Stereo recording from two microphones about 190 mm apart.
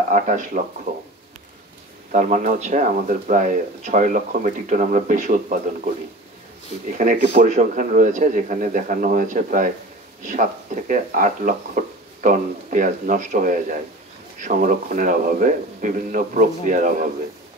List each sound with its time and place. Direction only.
0.1 s speech: 40° right (ahead or behind)
2.1 s speech: 40° right (ahead or behind)
6.9 s speech: 40° right (ahead or behind)